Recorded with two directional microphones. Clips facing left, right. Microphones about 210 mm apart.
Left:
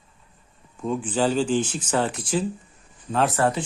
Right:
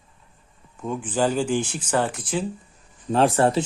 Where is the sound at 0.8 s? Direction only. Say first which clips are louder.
Even; 5° right (ahead or behind).